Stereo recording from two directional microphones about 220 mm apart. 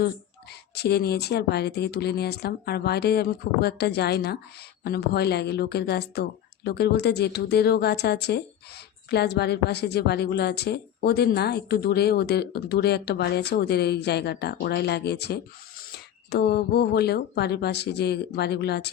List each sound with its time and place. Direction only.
0.8 s a woman's voice: 45° left (ahead or behind)